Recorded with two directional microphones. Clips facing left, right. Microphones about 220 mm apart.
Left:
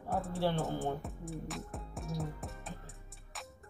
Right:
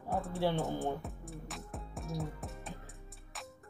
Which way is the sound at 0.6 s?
Centre (ahead or behind).